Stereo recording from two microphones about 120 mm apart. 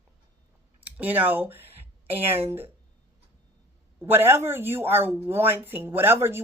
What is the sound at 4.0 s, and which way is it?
Speech, 20° right (ahead or behind).